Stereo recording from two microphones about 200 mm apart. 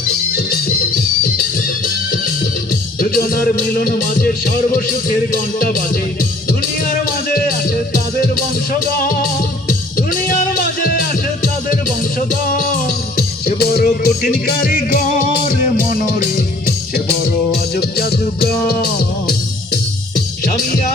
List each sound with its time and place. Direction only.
0.3 s music: 50° left (ahead or behind)
3.0 s music: 45° left (ahead or behind)
6.8 s music: 45° left (ahead or behind)
9.0 s music: 45° left (ahead or behind)